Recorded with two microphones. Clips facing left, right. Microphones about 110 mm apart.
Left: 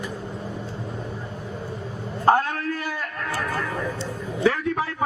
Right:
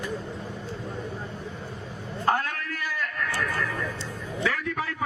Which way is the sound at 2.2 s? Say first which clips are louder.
Left 7 dB; 30° left (ahead or behind).